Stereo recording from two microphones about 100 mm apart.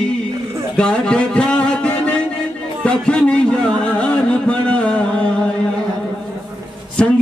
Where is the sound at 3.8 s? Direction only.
10° left (ahead or behind).